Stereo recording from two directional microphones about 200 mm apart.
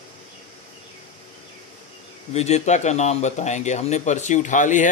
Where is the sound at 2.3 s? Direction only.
35° left (ahead or behind).